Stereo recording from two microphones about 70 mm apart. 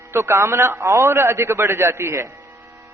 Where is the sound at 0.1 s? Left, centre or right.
Right.